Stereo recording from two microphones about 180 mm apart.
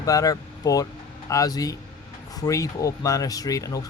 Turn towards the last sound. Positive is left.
turn(degrees=20)  # may be behind; listen again after turning